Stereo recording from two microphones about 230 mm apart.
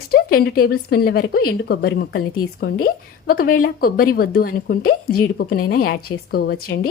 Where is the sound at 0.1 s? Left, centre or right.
Left.